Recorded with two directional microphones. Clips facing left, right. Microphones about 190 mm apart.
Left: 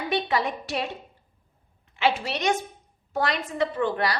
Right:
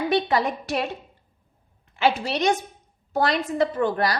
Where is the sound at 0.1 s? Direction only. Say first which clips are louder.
Right 1 dB; 45° right (ahead or behind).